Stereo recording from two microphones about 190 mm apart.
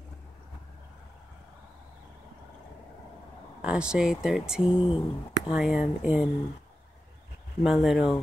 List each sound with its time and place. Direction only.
3.6 s speech: 5° right (ahead or behind)
4.8 s a sound: 25° left (ahead or behind)
5.5 s speech: 5° right (ahead or behind)
7.6 s speech: centre (ahead or behind)